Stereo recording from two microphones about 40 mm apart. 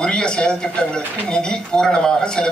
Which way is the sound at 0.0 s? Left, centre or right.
Left.